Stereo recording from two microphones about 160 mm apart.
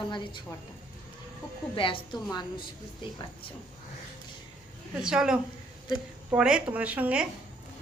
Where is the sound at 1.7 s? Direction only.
30° left (ahead or behind).